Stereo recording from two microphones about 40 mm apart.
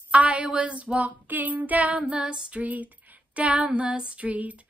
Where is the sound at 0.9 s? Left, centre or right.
Right.